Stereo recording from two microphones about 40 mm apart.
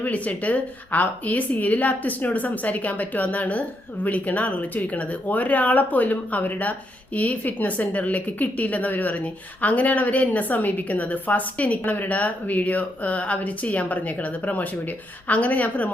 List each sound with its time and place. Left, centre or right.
0.0 s a woman's voice: left
11.8 s speech: left